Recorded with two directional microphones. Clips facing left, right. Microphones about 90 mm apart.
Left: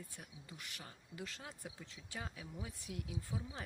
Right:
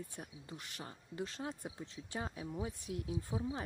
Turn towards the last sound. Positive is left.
turn(degrees=-30)  # may be behind; listen again after turning